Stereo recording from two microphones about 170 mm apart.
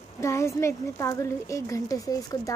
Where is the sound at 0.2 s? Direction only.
15° left (ahead or behind).